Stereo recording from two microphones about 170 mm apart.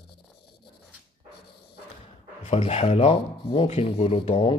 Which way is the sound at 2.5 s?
35° left (ahead or behind).